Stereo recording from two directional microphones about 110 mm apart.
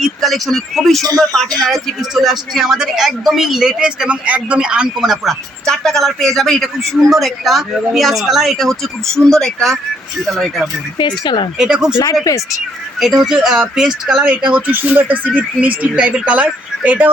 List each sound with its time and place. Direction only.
0.0 s speech: centre (ahead or behind)
10.9 s speech: 45° left (ahead or behind)
11.5 s speech: 5° right (ahead or behind)
13.0 s speech: 5° right (ahead or behind)
14.5 s speech: 15° right (ahead or behind)